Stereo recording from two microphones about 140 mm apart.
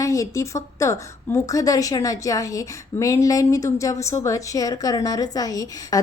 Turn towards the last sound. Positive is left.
turn(degrees=25)  # may be behind; listen again after turning